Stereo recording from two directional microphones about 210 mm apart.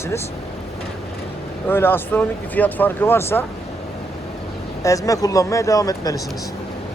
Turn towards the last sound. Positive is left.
turn(degrees=15)  # may be behind; listen again after turning